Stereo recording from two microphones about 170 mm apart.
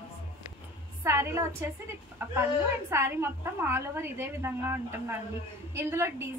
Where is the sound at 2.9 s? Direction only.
15° right (ahead or behind).